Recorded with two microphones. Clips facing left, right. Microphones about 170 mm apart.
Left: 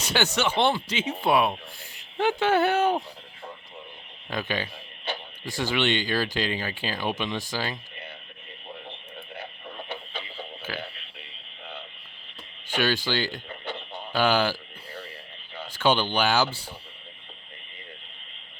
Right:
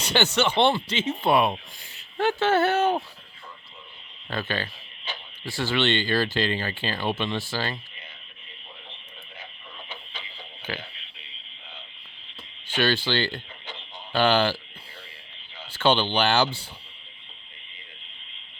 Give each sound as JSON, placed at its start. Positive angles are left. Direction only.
{"t": 0.0, "sound": "speech", "side_deg": 10}
{"t": 4.3, "sound": "speech", "side_deg": 15}
{"t": 9.4, "sound": "radio", "side_deg": 60}
{"t": 10.7, "sound": "speech", "side_deg": 5}
{"t": 12.6, "sound": "speech", "side_deg": 10}
{"t": 13.7, "sound": "a sound", "side_deg": 65}
{"t": 14.1, "sound": "speech", "side_deg": 10}
{"t": 15.7, "sound": "speech", "side_deg": 10}